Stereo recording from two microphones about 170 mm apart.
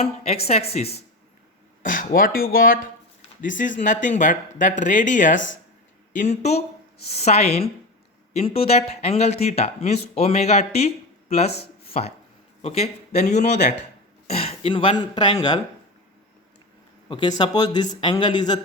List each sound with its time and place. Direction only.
0.0 s speech: 35° left (ahead or behind)
1.8 s speech: 55° left (ahead or behind)
11.5 s a sound: 70° left (ahead or behind)
12.6 s speech: 40° left (ahead or behind)
17.1 s speech: 25° left (ahead or behind)